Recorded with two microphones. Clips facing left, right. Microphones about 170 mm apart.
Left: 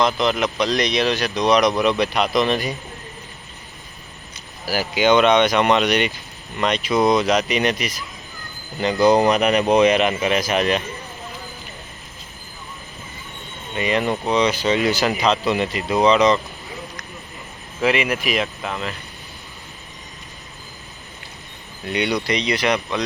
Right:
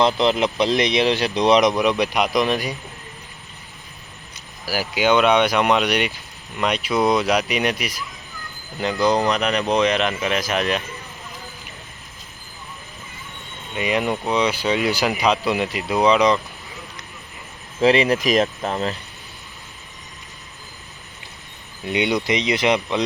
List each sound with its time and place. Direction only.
0.0 s speech: 25° right (ahead or behind); by 2.7 s 10° right (ahead or behind)
4.6 s speech: 5° right (ahead or behind)
9.0 s speech: 10° left (ahead or behind)
13.7 s speech: 5° right (ahead or behind)
17.7 s speech: 35° right (ahead or behind)
21.8 s speech: 20° right (ahead or behind)